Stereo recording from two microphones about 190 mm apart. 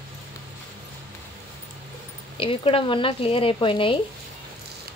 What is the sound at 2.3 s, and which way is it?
Speech, 30° left (ahead or behind).